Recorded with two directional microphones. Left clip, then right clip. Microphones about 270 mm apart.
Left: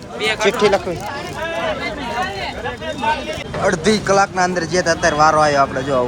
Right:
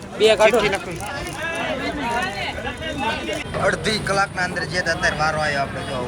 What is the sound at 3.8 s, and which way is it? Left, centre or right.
Speech, left.